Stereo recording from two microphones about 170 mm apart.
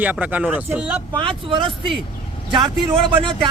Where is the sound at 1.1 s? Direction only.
30° right (ahead or behind).